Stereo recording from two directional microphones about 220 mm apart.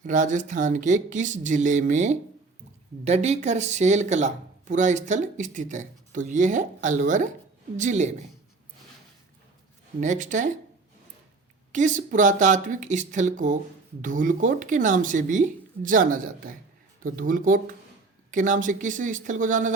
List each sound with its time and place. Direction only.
0.0 s speech: 35° right (ahead or behind)
10.0 s speech: 35° right (ahead or behind)
11.7 s speech: 35° right (ahead or behind)